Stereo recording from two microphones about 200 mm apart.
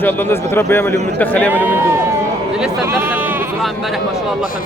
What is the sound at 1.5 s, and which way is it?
Speech, 10° right (ahead or behind).